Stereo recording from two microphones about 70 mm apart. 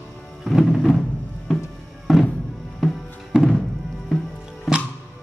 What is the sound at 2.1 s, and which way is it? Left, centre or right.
Music, centre.